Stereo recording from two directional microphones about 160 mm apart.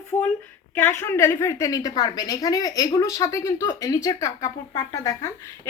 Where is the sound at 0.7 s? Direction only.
15° left (ahead or behind).